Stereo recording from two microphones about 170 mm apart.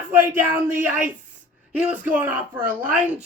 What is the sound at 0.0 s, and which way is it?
Speech, 10° right (ahead or behind).